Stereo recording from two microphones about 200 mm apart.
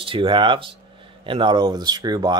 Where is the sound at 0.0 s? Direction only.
25° right (ahead or behind).